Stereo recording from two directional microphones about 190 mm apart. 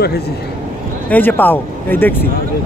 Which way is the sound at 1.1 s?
10° left (ahead or behind).